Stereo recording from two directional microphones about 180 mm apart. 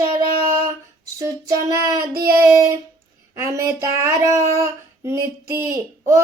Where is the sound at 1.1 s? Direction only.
20° right (ahead or behind).